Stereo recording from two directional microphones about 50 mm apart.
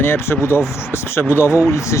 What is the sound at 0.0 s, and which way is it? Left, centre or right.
Speech, left.